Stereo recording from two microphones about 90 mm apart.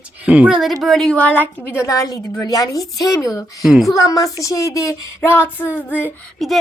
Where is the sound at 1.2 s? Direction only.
20° left (ahead or behind).